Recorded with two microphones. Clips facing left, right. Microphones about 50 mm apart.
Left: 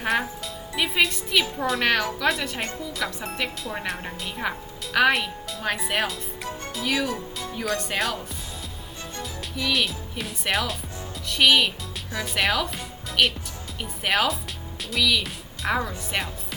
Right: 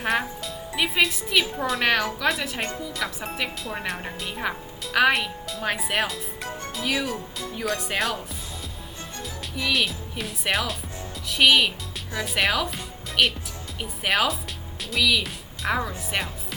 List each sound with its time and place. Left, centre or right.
0.0 s a woman's voice: centre
6.9 s speech: right
7.3 s a woman's voice: centre
9.6 s a woman's voice: centre